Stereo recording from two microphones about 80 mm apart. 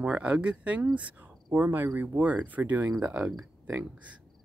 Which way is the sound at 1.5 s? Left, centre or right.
Right.